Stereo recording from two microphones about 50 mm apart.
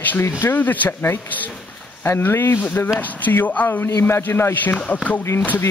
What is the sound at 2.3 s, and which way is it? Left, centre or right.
Speech, left.